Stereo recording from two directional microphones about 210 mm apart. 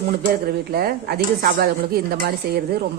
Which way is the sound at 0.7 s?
45° right (ahead or behind).